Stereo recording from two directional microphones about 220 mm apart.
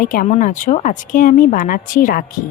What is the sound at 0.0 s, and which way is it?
Speech, 40° left (ahead or behind).